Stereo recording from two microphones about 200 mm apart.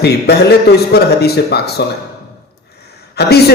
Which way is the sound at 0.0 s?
55° left (ahead or behind).